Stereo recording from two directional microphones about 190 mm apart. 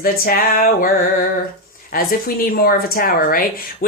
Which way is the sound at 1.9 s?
50° left (ahead or behind).